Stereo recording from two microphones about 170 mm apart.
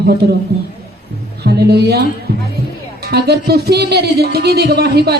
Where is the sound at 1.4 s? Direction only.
75° right (ahead or behind).